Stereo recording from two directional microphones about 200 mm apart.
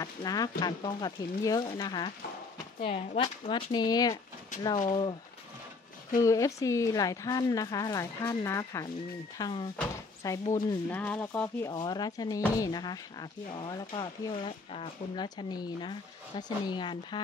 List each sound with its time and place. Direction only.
0.0 s speech: 20° left (ahead or behind)
6.2 s a woman's voice: 15° left (ahead or behind)